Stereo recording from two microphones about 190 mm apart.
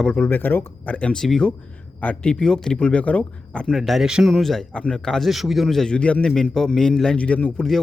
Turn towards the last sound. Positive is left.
turn(degrees=5)  # may be behind; listen again after turning